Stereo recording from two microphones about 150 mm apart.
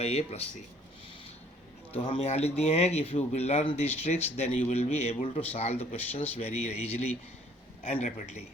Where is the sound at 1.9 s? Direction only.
35° left (ahead or behind).